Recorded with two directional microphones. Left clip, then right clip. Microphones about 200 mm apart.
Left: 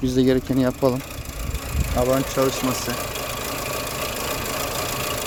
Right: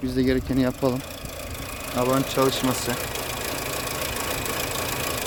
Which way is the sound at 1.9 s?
10° right (ahead or behind).